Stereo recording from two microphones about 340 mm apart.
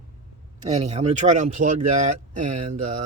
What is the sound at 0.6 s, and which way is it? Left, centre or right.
Speech, centre.